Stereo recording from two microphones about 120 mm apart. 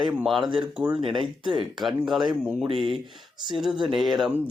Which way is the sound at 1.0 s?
45° right (ahead or behind).